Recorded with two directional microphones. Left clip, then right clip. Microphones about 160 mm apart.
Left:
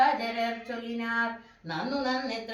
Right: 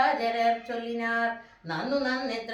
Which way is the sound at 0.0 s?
15° right (ahead or behind).